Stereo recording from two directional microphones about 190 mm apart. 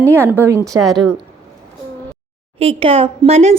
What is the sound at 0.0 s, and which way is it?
Speech, 10° right (ahead or behind).